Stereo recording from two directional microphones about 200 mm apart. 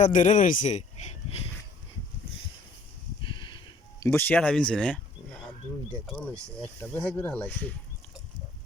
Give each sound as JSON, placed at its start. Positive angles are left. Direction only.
{"t": 0.0, "sound": "speech", "side_deg": 40}
{"t": 3.2, "sound": "a sound", "side_deg": 25}
{"t": 4.0, "sound": "speech", "side_deg": 10}